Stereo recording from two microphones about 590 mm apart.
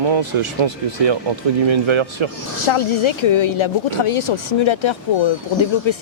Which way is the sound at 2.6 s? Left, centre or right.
Left.